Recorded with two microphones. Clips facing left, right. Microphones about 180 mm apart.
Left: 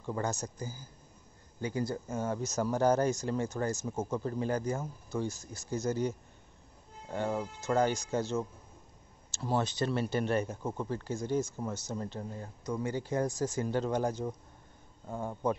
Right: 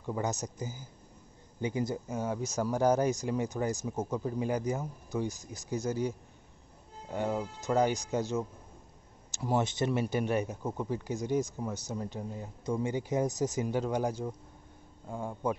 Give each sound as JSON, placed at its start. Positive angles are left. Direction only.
{"t": 0.0, "sound": "a man's voice", "side_deg": -10}
{"t": 0.3, "sound": "a man's voice", "side_deg": -20}
{"t": 15.0, "sound": "speech", "side_deg": 0}